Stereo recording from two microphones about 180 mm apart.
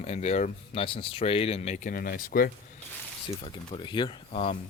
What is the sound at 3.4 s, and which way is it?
Speech, 30° left (ahead or behind).